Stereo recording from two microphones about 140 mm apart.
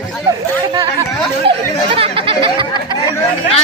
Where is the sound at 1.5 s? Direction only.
40° right (ahead or behind).